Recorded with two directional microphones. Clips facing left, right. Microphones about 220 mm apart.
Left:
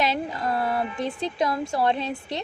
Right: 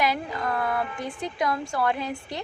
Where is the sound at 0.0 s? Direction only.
25° left (ahead or behind).